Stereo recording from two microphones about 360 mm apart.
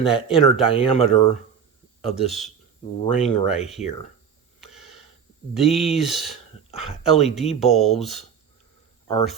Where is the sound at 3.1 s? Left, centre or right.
Centre.